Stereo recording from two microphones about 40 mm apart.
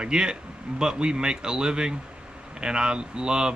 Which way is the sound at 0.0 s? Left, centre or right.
Right.